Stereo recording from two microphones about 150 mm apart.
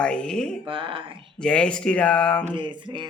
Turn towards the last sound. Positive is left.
turn(degrees=-30)  # may be behind; listen again after turning